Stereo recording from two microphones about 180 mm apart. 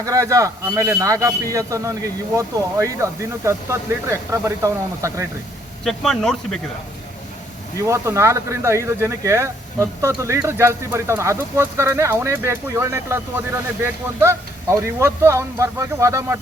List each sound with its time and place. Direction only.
0.0 s speech: 20° right (ahead or behind)
5.8 s speech: centre (ahead or behind)
7.8 s speech: 15° right (ahead or behind)